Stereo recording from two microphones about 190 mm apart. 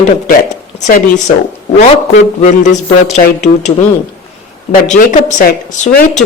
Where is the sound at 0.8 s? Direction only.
40° left (ahead or behind).